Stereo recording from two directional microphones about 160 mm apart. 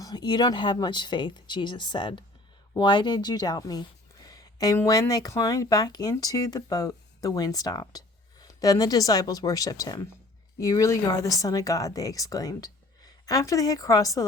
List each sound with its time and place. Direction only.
0.0 s speech: 25° left (ahead or behind)